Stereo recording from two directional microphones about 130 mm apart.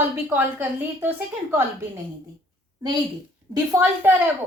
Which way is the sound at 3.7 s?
15° right (ahead or behind).